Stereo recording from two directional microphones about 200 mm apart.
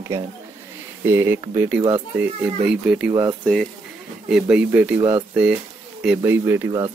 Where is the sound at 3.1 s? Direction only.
20° right (ahead or behind).